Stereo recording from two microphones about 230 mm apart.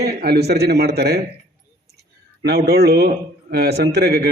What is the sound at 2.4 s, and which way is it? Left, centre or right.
A man's voice, right.